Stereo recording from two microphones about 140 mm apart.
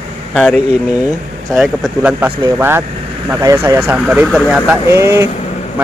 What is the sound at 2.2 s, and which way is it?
Speech, 15° right (ahead or behind).